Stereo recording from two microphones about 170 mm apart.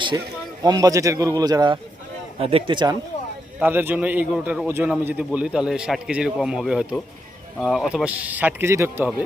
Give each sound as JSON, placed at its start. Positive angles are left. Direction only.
{"t": 0.6, "sound": "a man's voice", "side_deg": -20}
{"t": 3.6, "sound": "a man's voice", "side_deg": -10}